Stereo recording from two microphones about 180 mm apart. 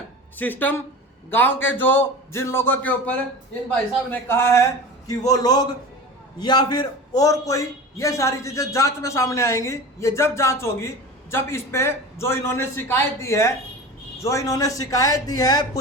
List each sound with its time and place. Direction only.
0.3 s a man's voice: 10° left (ahead or behind)